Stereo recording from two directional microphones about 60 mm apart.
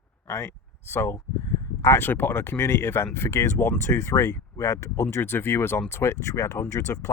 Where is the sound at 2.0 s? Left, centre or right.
Left.